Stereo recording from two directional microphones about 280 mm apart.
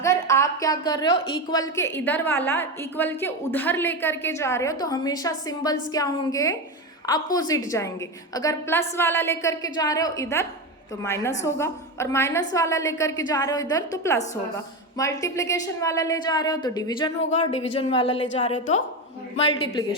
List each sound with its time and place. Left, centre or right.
0.0 s a woman's voice: centre